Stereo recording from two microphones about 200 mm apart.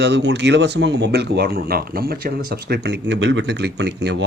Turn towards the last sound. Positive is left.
turn(degrees=-60)  # may be behind; listen again after turning